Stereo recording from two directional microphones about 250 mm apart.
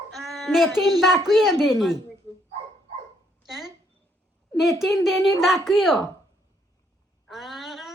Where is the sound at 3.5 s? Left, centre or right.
Centre.